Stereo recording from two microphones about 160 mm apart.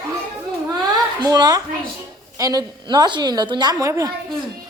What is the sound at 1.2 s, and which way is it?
A woman's voice, 25° right (ahead or behind).